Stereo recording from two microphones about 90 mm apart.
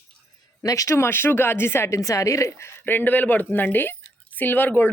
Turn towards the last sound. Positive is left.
turn(degrees=20)  # may be behind; listen again after turning